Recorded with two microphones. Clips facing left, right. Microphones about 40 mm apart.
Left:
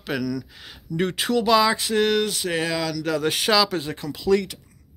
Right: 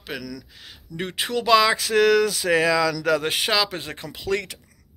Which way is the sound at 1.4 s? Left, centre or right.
Right.